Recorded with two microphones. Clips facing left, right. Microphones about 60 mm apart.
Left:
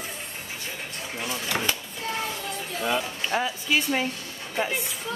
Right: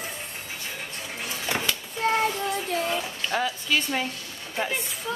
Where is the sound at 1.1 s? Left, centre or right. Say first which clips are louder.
Left 4 dB; centre.